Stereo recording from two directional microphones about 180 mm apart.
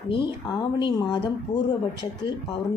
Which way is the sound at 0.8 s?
25° left (ahead or behind).